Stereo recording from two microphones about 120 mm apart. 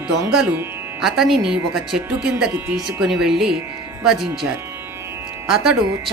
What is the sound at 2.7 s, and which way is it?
Speech, 5° right (ahead or behind).